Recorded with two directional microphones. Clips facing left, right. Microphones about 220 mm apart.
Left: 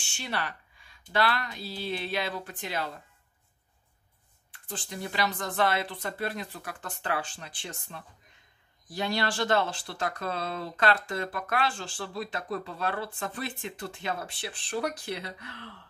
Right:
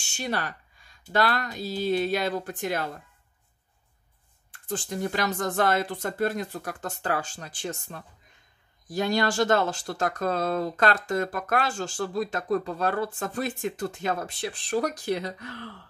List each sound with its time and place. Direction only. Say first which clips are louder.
0.0 s a sound: right 4 dB; 45° right (ahead or behind)
1.1 s speech: right 3 dB; 45° right (ahead or behind)
4.5 s speech: right 8 dB; 45° right (ahead or behind)